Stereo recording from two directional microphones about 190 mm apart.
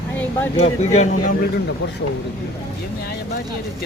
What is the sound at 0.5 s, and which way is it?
Speech, 35° left (ahead or behind).